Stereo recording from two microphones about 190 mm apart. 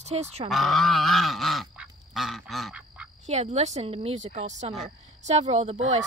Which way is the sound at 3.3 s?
35° right (ahead or behind).